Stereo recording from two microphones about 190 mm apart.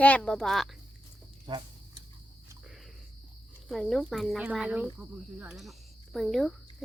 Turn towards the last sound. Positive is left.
turn(degrees=0)  # may be behind; listen again after turning